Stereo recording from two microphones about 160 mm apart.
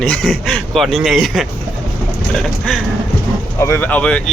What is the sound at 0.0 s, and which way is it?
Speech, centre (ahead or behind).